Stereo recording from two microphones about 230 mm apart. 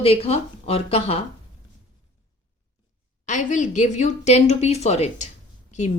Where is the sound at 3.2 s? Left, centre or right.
Left.